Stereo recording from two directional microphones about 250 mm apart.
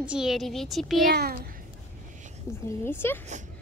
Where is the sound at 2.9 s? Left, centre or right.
Centre.